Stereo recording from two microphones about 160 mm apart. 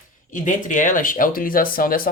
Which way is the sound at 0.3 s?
55° left (ahead or behind).